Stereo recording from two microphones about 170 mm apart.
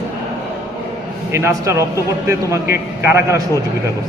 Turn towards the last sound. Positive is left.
turn(degrees=-15)  # may be behind; listen again after turning